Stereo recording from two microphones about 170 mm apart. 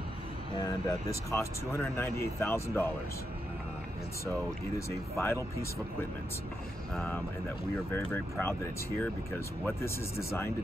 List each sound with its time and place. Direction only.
1.3 s speech: 15° left (ahead or behind)
4.3 s speech: 15° left (ahead or behind)
6.9 s speech: 10° left (ahead or behind)